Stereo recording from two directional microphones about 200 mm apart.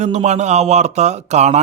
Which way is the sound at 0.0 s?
35° right (ahead or behind).